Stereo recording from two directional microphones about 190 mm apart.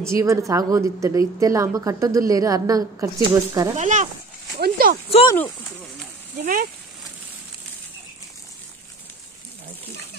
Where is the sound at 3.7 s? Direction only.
40° right (ahead or behind).